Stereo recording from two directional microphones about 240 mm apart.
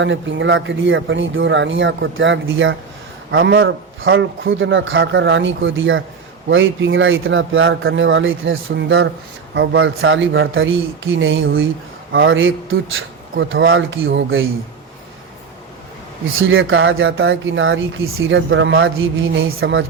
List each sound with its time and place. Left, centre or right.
0.0 s speech: right
16.4 s speech: right